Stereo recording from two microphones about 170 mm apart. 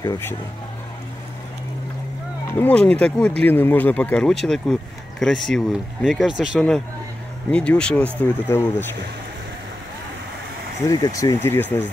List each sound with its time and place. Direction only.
0.0 s speech: 15° left (ahead or behind)
2.4 s speech: 10° left (ahead or behind); by 6.6 s 5° right (ahead or behind)
7.5 s speech: 5° left (ahead or behind)
10.9 s speech: 20° left (ahead or behind)